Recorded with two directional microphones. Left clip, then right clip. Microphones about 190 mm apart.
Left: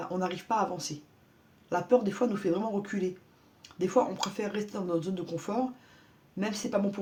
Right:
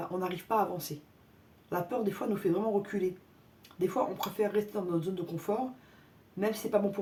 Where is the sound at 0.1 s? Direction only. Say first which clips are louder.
Left 2 dB; 35° left (ahead or behind).